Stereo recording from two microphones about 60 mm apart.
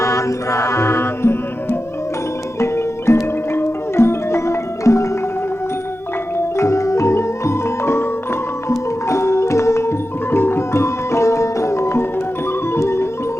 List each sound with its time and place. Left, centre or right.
0.0 s music: left
6.3 s music: left
10.3 s music: left